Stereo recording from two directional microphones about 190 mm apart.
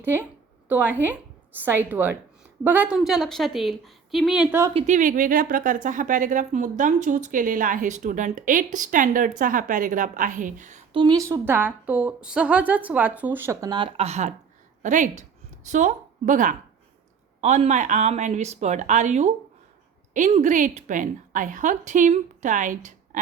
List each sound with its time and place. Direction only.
0.0 s a woman's voice: 10° right (ahead or behind)
4.7 s a woman's voice: 35° right (ahead or behind)
10.9 s a woman's voice: 20° right (ahead or behind); by 23.2 s 40° right (ahead or behind)